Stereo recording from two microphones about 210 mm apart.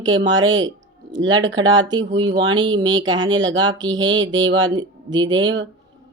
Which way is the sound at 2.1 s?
20° right (ahead or behind).